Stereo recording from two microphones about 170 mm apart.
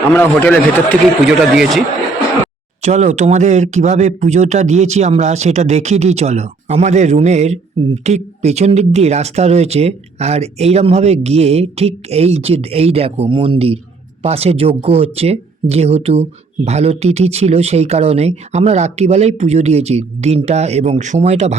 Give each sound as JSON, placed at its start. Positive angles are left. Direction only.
{"t": 0.1, "sound": "a man's voice", "side_deg": 10}
{"t": 1.2, "sound": "speech", "side_deg": -5}
{"t": 2.8, "sound": "speech", "side_deg": -40}